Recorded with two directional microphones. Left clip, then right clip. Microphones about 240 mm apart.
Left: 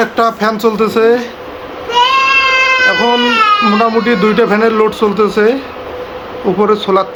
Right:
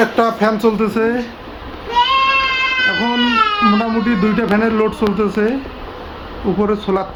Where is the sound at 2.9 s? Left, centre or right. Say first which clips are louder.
Left 6 dB; centre.